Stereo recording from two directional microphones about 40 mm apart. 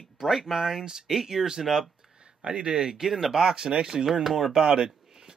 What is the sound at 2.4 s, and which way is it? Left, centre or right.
Speech, centre.